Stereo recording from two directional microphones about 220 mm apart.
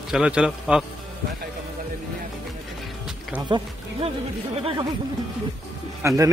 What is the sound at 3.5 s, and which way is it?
Speech, 20° right (ahead or behind).